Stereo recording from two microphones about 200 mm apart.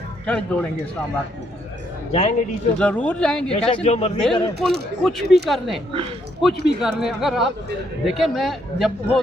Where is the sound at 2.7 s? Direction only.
5° left (ahead or behind).